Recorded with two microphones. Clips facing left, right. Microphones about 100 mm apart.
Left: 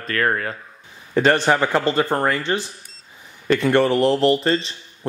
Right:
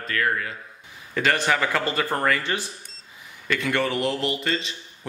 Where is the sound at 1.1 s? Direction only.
35° left (ahead or behind).